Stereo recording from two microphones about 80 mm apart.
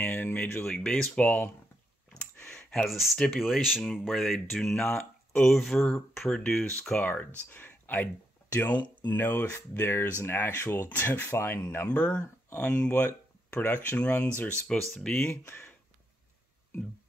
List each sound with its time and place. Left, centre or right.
0.0 s a sound: left
0.7 s speech: centre
2.1 s clicking: centre
3.3 s speech: centre
7.1 s speech: left
12.9 s speech: left
13.9 s speech: centre
14.7 s speech: centre
15.1 s speech: left